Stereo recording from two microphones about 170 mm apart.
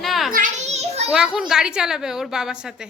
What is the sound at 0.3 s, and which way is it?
Children playing, 45° right (ahead or behind).